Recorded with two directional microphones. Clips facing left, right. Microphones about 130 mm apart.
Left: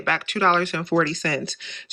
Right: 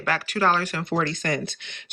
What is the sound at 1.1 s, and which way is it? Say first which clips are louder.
Speech: left 1 dB; 55° right (ahead or behind).